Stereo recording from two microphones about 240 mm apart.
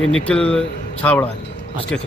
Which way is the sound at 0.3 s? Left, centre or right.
Centre.